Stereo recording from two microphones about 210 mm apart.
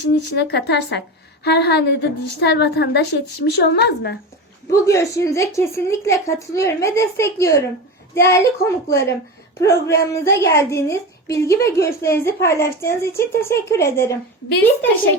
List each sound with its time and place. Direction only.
0.1 s a woman's voice: 50° left (ahead or behind)
4.7 s a woman's voice: 15° left (ahead or behind)